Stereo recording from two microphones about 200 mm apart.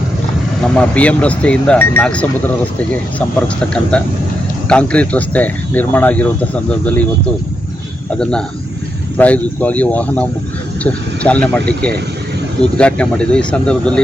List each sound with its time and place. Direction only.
0.8 s speech: 5° left (ahead or behind)
8.2 s speech: 5° left (ahead or behind)